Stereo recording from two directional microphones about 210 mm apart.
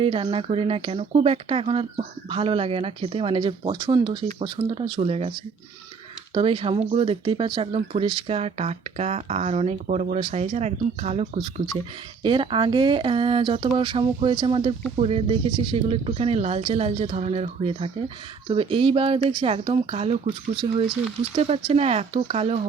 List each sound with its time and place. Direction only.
0.0 s speech: 25° right (ahead or behind)
6.3 s speech: 25° right (ahead or behind)
21.3 s speech: 30° right (ahead or behind)